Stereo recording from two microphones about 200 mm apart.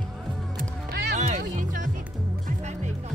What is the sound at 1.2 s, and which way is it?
Music, 40° right (ahead or behind).